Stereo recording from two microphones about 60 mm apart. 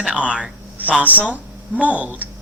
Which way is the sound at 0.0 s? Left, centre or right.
Centre.